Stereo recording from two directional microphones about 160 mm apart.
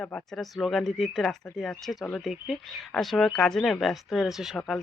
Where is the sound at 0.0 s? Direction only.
5° left (ahead or behind).